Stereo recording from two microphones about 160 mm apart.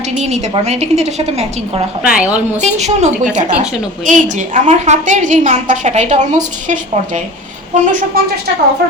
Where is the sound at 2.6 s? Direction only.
45° right (ahead or behind).